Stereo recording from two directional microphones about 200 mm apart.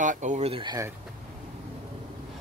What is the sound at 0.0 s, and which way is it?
Speech, 40° right (ahead or behind).